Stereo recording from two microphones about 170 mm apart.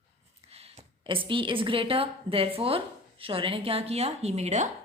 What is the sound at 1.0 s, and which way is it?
A woman's voice, 30° right (ahead or behind).